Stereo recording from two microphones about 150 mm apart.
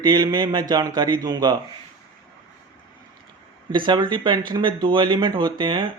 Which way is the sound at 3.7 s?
30° right (ahead or behind).